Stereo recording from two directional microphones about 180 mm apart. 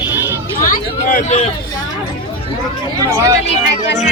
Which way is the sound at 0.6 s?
50° left (ahead or behind).